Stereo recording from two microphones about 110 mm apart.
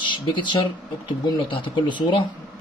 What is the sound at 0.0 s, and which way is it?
Speech, 45° left (ahead or behind).